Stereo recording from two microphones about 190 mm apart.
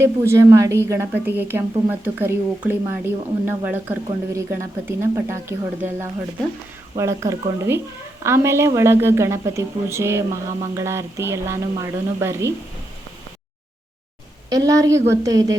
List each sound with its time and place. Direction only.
0.0 s a woman's voice: 15° right (ahead or behind)
14.5 s a woman's voice: 20° right (ahead or behind)